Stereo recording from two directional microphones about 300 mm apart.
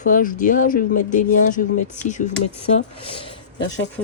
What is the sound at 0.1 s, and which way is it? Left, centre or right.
Speech, left.